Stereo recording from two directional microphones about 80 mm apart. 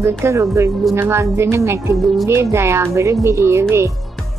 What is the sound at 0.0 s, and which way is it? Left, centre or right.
A woman's voice, right.